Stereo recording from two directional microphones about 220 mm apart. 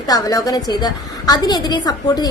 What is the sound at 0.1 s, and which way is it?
A woman's voice, 15° left (ahead or behind).